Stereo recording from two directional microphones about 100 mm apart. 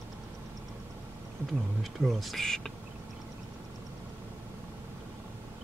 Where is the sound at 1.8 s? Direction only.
Centre (ahead or behind).